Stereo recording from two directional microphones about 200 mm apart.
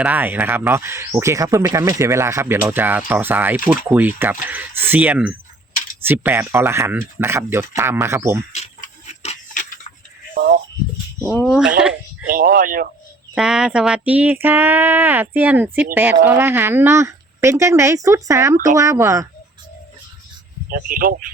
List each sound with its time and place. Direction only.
0.0 s speech: 10° right (ahead or behind)
8.5 s a sound: 35° left (ahead or behind)
10.3 s speech: 45° right (ahead or behind)
11.3 s speech: centre (ahead or behind)
12.4 s speech: 45° right (ahead or behind)
13.3 s speech: 5° right (ahead or behind)
20.7 s speech: 45° right (ahead or behind)